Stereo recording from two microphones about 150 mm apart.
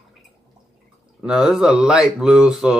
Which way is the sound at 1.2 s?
Centre (ahead or behind).